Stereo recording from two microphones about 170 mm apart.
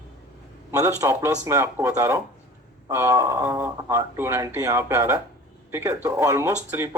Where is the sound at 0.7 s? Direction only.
20° right (ahead or behind).